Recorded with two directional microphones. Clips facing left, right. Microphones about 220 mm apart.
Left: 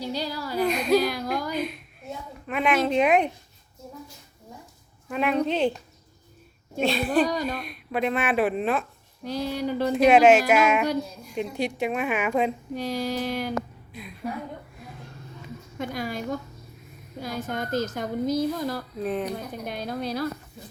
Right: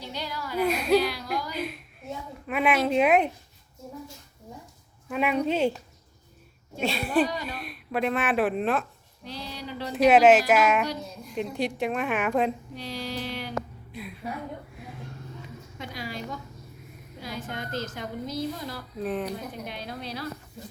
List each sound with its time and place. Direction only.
0.0 s speech: 35° left (ahead or behind)
0.6 s speech: 5° right (ahead or behind)
0.9 s a sound: 45° left (ahead or behind)
1.5 s a sound: 5° right (ahead or behind)
5.0 s speech: 5° right (ahead or behind)
6.8 s speech: 5° right (ahead or behind)
7.3 s speech: 40° left (ahead or behind)
7.5 s speech: centre (ahead or behind)
9.2 s a woman's voice: 45° left (ahead or behind)
9.9 s speech: 5° right (ahead or behind)
12.7 s a woman's voice: 45° left (ahead or behind)
13.9 s a woman's voice: 5° right (ahead or behind)
15.8 s a woman's voice: 50° left (ahead or behind)